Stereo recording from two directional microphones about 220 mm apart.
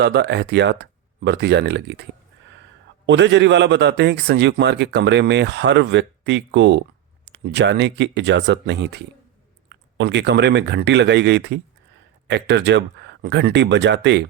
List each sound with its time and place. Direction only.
0.0 s a man's voice: 50° right (ahead or behind)
3.1 s a man's voice: 55° right (ahead or behind)